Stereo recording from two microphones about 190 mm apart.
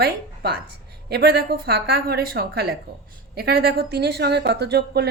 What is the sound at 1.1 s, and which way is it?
Speech, 55° right (ahead or behind).